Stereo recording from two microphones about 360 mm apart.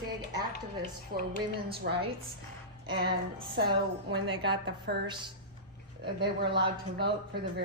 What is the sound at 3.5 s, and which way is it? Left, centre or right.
Speech, right.